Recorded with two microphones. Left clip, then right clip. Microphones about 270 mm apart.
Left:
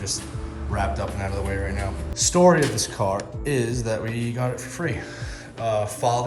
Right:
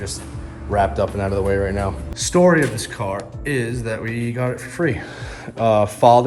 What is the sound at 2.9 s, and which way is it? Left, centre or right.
Speech, centre.